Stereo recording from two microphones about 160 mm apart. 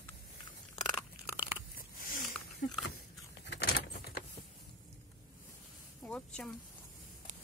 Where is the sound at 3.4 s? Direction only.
85° left.